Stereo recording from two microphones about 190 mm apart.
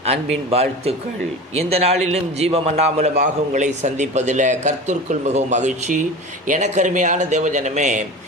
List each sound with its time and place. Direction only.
0.0 s a man's voice: 35° right (ahead or behind)